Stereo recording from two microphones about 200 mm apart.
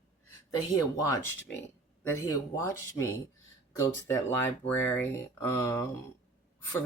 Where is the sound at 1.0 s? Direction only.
15° left (ahead or behind).